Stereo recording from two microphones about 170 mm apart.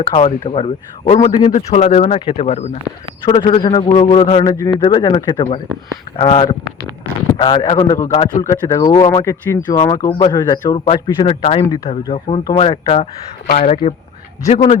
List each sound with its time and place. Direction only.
0.0 s a man's voice: 35° left (ahead or behind)
4.5 s a man's voice: 20° left (ahead or behind)
13.6 s a man's voice: 40° left (ahead or behind)